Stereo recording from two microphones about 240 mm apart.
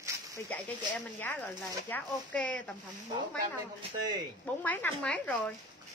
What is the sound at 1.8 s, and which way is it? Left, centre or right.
Speech, centre.